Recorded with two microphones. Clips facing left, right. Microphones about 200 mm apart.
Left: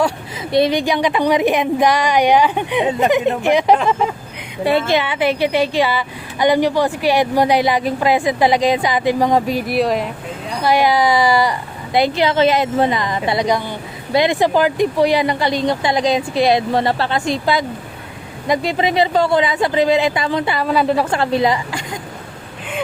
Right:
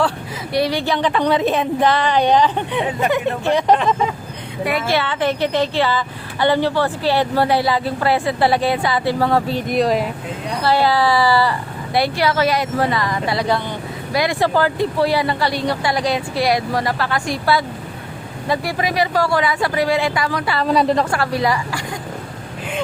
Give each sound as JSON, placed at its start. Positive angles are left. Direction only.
{"t": 0.5, "sound": "a woman's voice", "side_deg": 20}
{"t": 3.8, "sound": "a woman's voice", "side_deg": 0}
{"t": 4.6, "sound": "a woman's voice", "side_deg": 30}
{"t": 4.9, "sound": "a woman's voice", "side_deg": 15}
{"t": 10.6, "sound": "a woman's voice", "side_deg": 15}
{"t": 20.7, "sound": "a woman's voice", "side_deg": 0}
{"t": 21.0, "sound": "a woman's voice", "side_deg": 20}